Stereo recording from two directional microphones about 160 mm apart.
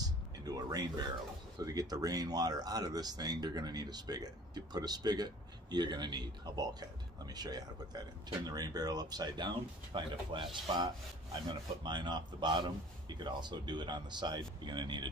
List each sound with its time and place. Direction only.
0.0 s music: 25° right (ahead or behind)
1.6 s speech: 25° right (ahead or behind)